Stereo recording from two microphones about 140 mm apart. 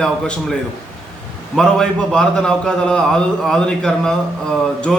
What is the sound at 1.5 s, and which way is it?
A man's voice, 5° left (ahead or behind).